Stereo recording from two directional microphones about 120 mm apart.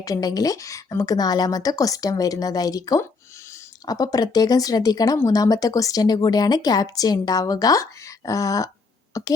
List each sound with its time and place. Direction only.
0.0 s speech: 30° left (ahead or behind)
9.1 s throat clearing: 25° left (ahead or behind)